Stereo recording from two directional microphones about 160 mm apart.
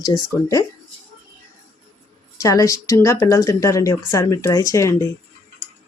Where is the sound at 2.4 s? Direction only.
20° left (ahead or behind).